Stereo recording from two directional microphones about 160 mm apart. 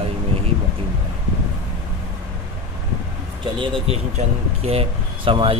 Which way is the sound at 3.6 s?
30° right (ahead or behind).